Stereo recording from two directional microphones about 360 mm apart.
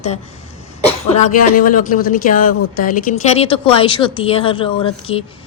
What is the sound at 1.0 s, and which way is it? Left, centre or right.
Speech, centre.